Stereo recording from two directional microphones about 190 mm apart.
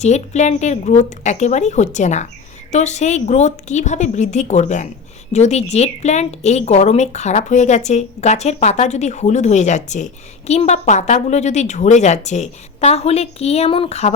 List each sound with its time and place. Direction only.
0.0 s a woman's voice: 35° left (ahead or behind)